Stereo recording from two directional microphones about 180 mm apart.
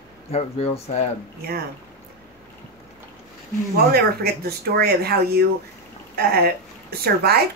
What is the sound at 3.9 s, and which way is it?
A woman's voice, 60° right (ahead or behind).